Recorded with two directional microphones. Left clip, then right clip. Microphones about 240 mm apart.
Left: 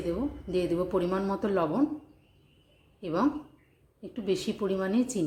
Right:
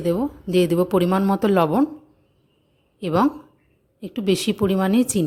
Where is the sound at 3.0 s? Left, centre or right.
Right.